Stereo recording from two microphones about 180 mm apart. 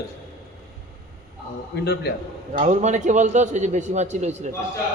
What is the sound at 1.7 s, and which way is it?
Speech, 65° left (ahead or behind).